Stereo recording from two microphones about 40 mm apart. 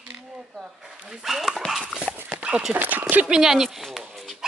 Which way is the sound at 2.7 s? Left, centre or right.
Right.